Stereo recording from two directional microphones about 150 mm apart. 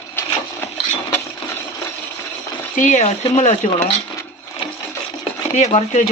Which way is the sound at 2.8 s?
55° left (ahead or behind).